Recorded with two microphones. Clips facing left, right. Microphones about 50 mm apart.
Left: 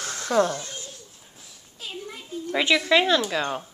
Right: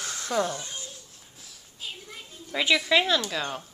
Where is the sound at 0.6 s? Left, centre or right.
Right.